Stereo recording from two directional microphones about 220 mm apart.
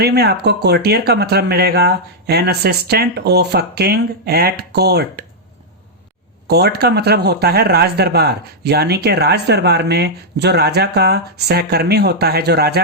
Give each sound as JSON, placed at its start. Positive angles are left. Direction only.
{"t": 0.0, "sound": "speech", "side_deg": -45}
{"t": 6.5, "sound": "speech", "side_deg": -50}